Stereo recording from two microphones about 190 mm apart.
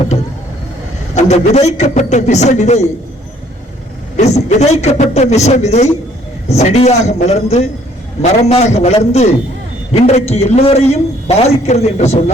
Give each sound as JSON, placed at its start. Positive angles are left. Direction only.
{"t": 1.1, "sound": "a man's voice", "side_deg": 35}
{"t": 4.2, "sound": "a man's voice", "side_deg": 35}